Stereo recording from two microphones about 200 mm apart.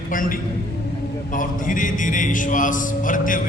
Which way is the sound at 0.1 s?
45° left (ahead or behind).